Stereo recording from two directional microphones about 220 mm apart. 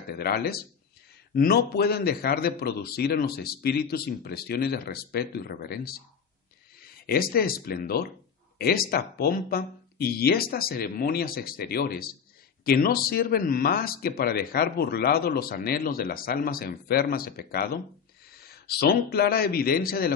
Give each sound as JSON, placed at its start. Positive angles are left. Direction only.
{"t": 0.1, "sound": "a man's voice", "side_deg": 45}